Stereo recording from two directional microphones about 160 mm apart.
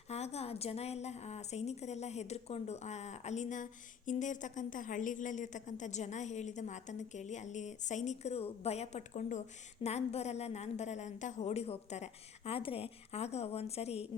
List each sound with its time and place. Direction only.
0.1 s a woman's voice: 40° left (ahead or behind)